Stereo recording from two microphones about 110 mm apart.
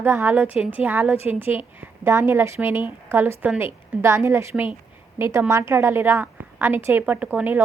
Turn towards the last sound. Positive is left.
turn(degrees=-20)  # may be behind; listen again after turning